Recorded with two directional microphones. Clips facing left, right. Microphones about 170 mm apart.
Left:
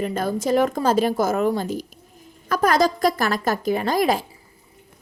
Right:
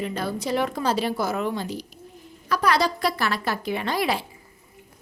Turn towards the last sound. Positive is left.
turn(degrees=45)  # may be behind; listen again after turning